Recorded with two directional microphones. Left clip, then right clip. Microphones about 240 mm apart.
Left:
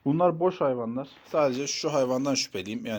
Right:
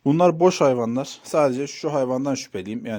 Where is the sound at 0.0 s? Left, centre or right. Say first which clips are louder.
Right 7 dB; right.